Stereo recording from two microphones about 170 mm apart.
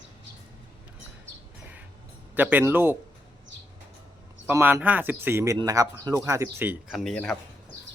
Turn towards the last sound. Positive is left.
turn(degrees=5)  # may be behind; listen again after turning